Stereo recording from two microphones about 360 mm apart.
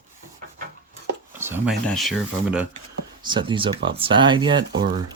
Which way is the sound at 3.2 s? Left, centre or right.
Centre.